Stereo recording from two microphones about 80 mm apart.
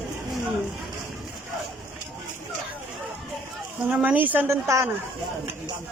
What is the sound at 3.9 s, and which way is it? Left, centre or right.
Speech, centre.